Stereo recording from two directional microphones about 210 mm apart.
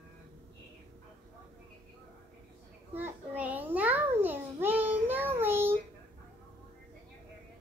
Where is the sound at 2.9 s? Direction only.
10° right (ahead or behind).